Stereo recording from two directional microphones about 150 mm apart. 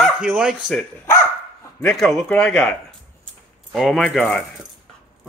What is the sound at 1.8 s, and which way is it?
Speech, centre (ahead or behind).